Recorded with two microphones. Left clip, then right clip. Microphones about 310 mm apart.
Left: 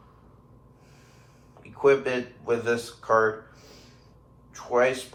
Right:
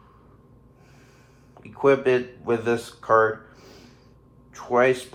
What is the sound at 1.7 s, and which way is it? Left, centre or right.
Speech, right.